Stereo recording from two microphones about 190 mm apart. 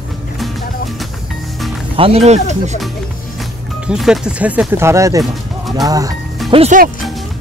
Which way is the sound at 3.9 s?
5° right (ahead or behind).